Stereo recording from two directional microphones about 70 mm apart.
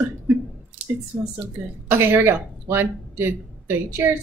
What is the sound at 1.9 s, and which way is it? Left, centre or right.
A woman's voice, right.